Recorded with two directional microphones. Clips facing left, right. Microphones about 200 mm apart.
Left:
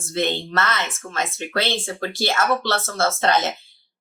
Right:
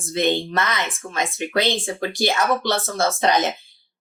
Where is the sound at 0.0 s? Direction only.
15° right (ahead or behind).